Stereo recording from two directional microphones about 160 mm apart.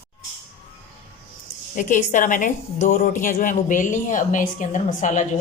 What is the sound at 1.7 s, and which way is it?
A woman's voice, 55° left (ahead or behind).